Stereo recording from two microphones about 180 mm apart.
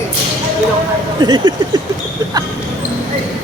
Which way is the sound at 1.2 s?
25° right (ahead or behind).